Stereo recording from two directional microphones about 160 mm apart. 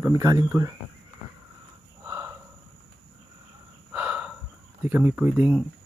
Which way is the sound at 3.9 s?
5° right (ahead or behind).